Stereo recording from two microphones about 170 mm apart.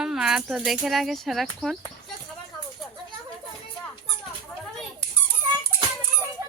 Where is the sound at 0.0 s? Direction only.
5° right (ahead or behind).